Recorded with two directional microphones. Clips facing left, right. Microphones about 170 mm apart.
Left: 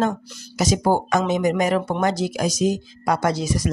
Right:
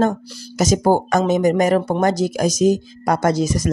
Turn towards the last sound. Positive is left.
turn(degrees=-45)  # may be behind; listen again after turning